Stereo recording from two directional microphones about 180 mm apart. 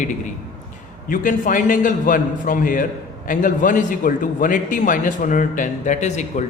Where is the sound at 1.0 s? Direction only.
50° left (ahead or behind).